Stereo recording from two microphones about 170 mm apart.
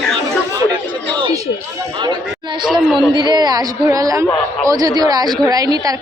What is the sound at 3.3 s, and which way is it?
A woman's voice, 25° right (ahead or behind).